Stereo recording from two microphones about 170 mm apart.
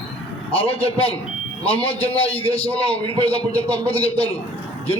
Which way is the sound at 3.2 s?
35° left (ahead or behind).